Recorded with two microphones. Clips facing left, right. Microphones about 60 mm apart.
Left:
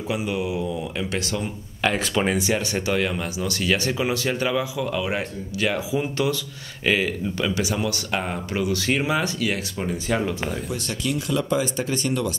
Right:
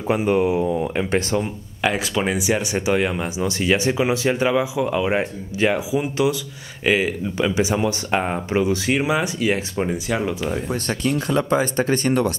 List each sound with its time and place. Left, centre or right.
0.1 s speech: right
1.4 s speech: centre; by 5.9 s right
5.9 s speech: centre
8.8 s speech: centre
10.0 s speech: centre
10.5 s speech: right